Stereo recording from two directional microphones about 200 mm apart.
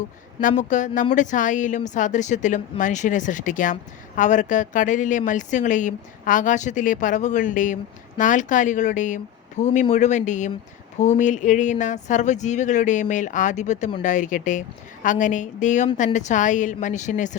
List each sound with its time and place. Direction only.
0.4 s speech: 40° left (ahead or behind)